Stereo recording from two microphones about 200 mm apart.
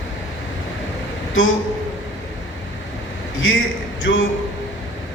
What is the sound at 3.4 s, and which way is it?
Speech, 80° left.